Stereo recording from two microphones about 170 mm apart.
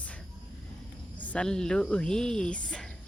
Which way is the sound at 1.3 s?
5° left (ahead or behind).